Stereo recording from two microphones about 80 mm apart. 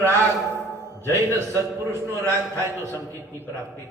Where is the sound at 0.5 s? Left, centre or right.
Right.